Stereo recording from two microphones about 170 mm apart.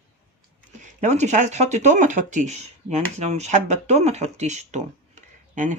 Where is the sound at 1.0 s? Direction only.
45° right (ahead or behind).